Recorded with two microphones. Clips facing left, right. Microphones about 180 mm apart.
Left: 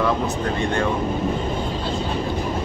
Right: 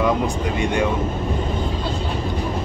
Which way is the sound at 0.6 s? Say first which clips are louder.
Right 3 dB; 15° right (ahead or behind).